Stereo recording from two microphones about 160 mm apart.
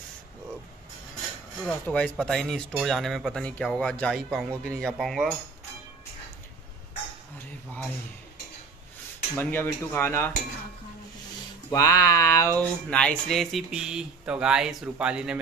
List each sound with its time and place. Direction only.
1.6 s speech: 5° left (ahead or behind)
9.4 s cutlery: 15° left (ahead or behind)
11.7 s speech: 20° left (ahead or behind)
12.5 s speech: 5° left (ahead or behind)